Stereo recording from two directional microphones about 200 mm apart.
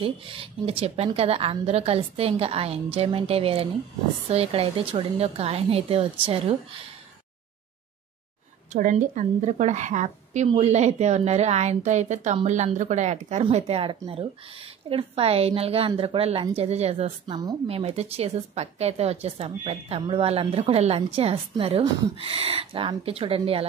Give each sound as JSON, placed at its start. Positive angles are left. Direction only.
{"t": 0.0, "sound": "a woman's voice", "side_deg": -25}
{"t": 8.7, "sound": "a woman's voice", "side_deg": -40}